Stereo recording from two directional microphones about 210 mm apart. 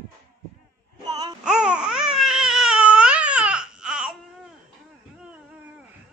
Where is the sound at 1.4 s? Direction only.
5° right (ahead or behind).